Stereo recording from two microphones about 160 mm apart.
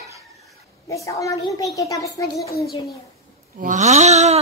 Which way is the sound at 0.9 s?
20° left (ahead or behind).